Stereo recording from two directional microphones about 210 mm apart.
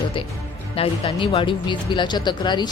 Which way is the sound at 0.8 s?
30° left (ahead or behind).